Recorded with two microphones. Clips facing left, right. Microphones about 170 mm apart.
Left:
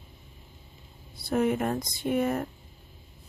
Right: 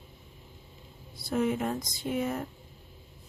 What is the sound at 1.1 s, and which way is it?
Speech, 60° left (ahead or behind).